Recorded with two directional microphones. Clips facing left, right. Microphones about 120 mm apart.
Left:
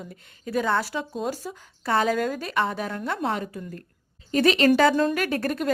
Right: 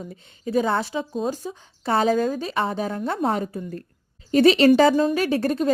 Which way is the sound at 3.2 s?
35° right (ahead or behind).